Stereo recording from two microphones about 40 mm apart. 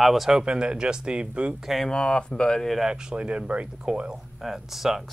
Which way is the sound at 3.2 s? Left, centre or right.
Right.